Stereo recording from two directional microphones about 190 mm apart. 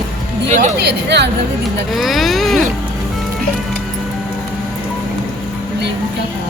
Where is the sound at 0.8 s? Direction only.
65° right (ahead or behind).